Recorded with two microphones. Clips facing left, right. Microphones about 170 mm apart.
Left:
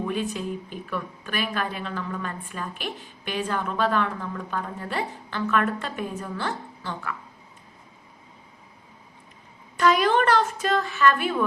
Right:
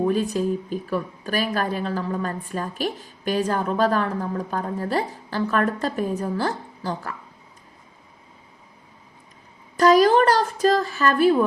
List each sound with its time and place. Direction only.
0.0 s speech: 40° right (ahead or behind)
9.7 s speech: 40° right (ahead or behind)